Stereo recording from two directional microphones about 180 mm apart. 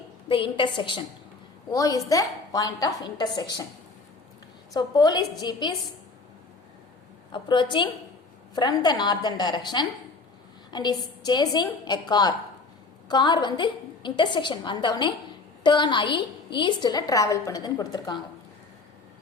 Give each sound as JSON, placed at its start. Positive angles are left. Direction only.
{"t": 0.3, "sound": "a woman's voice", "side_deg": 30}
{"t": 4.7, "sound": "a woman's voice", "side_deg": 20}
{"t": 7.3, "sound": "a woman's voice", "side_deg": 25}